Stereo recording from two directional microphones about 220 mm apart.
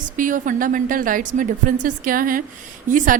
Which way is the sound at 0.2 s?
35° right (ahead or behind).